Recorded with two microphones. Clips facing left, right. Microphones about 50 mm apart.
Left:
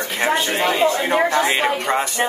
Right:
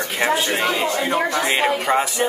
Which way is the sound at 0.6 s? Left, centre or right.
Left.